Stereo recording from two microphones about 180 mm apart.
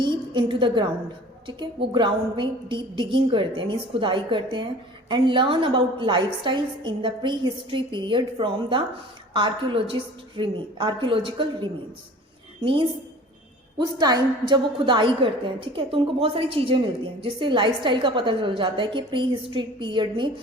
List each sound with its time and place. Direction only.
0.0 s a woman's voice: 25° right (ahead or behind)
13.7 s a woman's voice: 25° right (ahead or behind)